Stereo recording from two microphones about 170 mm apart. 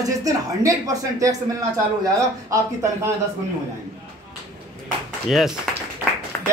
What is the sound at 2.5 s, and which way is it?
Speech, 20° right (ahead or behind).